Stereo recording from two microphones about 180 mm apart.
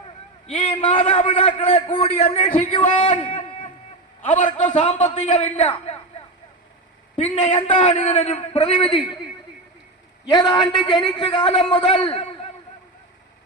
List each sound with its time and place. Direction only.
0.4 s a man's voice: 35° left (ahead or behind)
7.2 s a man's voice: 35° left (ahead or behind)
10.2 s a man's voice: 25° left (ahead or behind)